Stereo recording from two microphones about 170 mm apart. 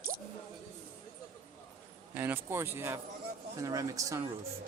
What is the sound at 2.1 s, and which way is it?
A woman's voice, 10° right (ahead or behind).